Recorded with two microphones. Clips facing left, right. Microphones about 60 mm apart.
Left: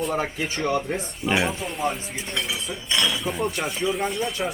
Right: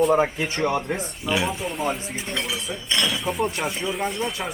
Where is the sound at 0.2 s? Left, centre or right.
Centre.